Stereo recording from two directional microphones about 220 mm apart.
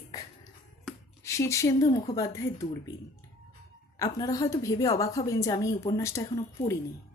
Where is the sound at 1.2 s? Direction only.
15° left (ahead or behind).